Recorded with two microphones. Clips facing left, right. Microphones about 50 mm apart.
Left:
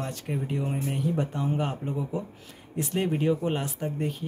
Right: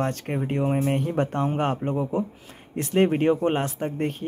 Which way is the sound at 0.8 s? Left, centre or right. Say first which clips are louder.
Right 4 dB; right.